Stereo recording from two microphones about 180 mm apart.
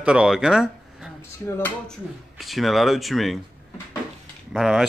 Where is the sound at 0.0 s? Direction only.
5° right (ahead or behind).